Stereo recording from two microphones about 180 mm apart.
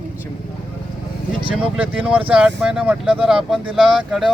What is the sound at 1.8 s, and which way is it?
Speech, 5° right (ahead or behind).